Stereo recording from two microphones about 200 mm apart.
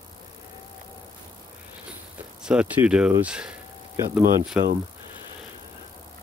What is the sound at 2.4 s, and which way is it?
Speech, 5° right (ahead or behind).